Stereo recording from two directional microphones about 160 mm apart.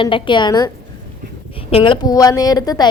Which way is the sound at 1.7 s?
35° left (ahead or behind).